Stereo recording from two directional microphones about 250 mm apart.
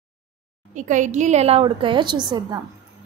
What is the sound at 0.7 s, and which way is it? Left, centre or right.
A woman's voice, right.